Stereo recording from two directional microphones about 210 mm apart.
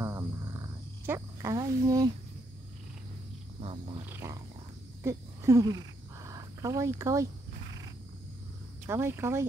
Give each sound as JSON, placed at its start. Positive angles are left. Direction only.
{"t": 0.0, "sound": "frog", "side_deg": -15}
{"t": 4.0, "sound": "cat", "side_deg": -10}
{"t": 5.0, "sound": "a sound", "side_deg": -15}
{"t": 8.8, "sound": "speech", "side_deg": -10}